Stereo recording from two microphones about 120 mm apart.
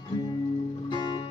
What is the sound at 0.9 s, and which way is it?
Music, 40° left (ahead or behind).